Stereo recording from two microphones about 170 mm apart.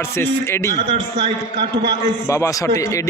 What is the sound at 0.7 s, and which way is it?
A man's voice, 30° right (ahead or behind).